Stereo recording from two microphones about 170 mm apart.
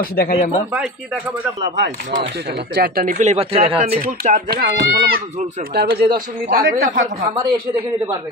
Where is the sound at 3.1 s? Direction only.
40° right (ahead or behind).